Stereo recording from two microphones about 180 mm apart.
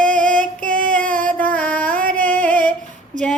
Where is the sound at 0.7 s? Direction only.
50° right (ahead or behind).